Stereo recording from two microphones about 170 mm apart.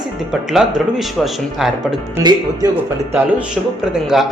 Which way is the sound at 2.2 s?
25° right (ahead or behind).